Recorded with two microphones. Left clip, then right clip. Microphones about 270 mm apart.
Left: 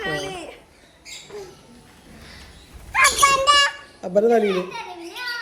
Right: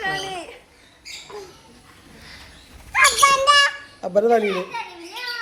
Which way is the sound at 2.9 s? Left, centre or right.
Centre.